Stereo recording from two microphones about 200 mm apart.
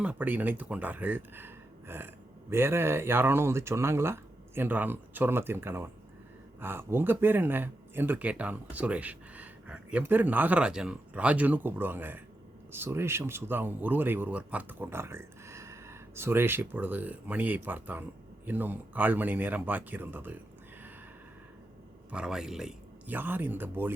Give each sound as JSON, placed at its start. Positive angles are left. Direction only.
{"t": 0.0, "sound": "speech", "side_deg": -5}
{"t": 22.1, "sound": "speech", "side_deg": -5}